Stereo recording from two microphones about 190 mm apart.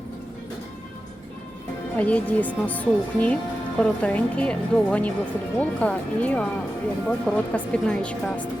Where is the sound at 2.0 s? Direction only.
10° left (ahead or behind).